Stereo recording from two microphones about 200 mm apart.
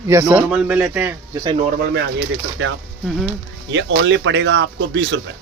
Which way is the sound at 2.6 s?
75° right (ahead or behind).